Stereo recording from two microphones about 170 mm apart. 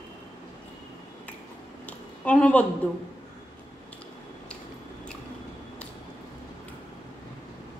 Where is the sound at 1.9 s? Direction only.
10° left (ahead or behind).